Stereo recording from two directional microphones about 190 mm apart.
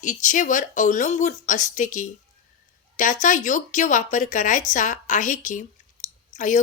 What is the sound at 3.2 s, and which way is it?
A woman's voice, 40° left (ahead or behind).